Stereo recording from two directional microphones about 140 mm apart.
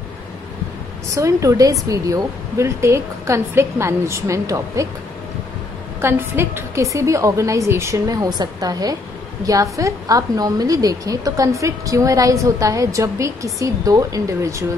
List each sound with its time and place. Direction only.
1.1 s a woman's voice: 25° right (ahead or behind)
5.9 s a woman's voice: 15° right (ahead or behind)